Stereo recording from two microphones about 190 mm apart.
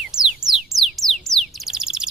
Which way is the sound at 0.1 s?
5° right (ahead or behind).